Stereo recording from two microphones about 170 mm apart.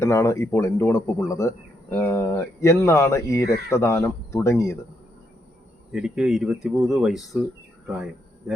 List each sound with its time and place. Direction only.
0.0 s speech: 15° left (ahead or behind)
5.9 s speech: 5° right (ahead or behind)